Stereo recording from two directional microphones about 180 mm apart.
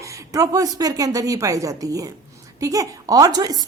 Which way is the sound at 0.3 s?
20° right (ahead or behind).